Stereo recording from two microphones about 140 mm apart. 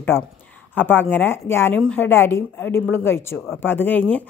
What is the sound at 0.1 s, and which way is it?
Speech, 15° left (ahead or behind).